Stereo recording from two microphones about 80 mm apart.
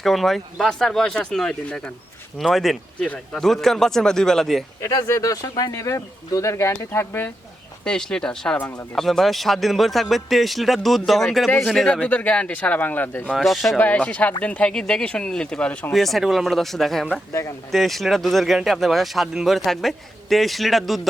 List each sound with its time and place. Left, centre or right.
0.0 s speech: centre
4.9 s speech: left
7.9 s speech: centre
12.0 s speech: centre
13.3 s speech: centre
13.7 s speech: centre
15.9 s speech: centre